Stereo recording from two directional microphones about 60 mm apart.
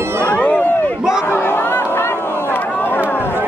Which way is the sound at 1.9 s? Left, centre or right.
Left.